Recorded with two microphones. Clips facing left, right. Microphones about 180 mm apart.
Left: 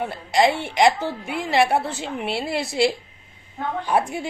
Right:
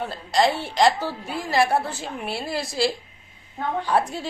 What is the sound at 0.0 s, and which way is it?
A woman's voice, 15° left (ahead or behind).